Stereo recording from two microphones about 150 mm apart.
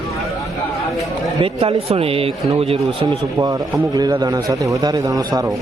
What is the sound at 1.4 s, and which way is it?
Speech, 40° right (ahead or behind).